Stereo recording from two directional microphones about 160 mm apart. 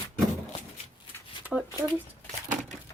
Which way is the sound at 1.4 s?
5° right (ahead or behind).